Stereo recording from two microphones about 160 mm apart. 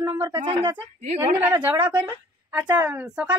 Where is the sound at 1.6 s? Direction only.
10° right (ahead or behind).